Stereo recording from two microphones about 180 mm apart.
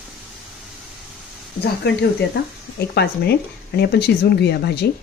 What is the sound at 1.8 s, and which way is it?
Speech, 65° left (ahead or behind).